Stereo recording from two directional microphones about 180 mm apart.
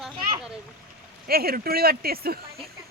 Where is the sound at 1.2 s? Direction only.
55° right (ahead or behind).